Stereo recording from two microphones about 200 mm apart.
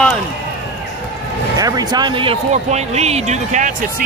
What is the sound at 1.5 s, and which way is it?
Speech, 20° right (ahead or behind).